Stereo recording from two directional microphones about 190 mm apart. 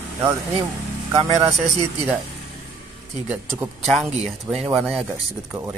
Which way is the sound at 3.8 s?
Centre (ahead or behind).